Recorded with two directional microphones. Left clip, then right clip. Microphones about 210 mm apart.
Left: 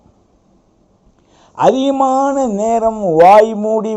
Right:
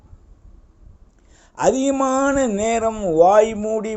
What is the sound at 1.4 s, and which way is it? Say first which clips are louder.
A man's voice: left 6 dB; 20° right (ahead or behind).